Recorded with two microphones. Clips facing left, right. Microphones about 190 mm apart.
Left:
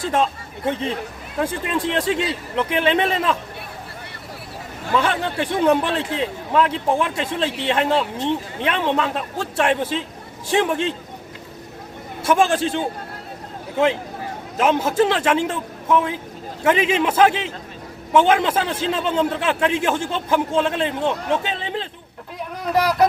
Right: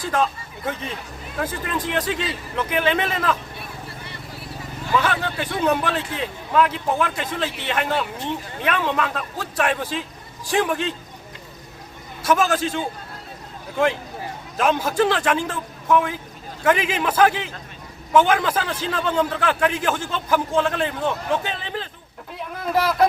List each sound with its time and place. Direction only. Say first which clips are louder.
0.0 s a man's voice: left 2 dB; 25° left (ahead or behind)
5.0 s a man's voice: left 2 dB; 30° left (ahead or behind)
12.2 s a man's voice: left 2 dB; 30° left (ahead or behind)
14.6 s a man's voice: left 2 dB; 25° left (ahead or behind)